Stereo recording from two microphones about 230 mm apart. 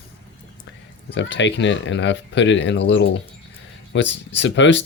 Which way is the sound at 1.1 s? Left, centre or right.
Left.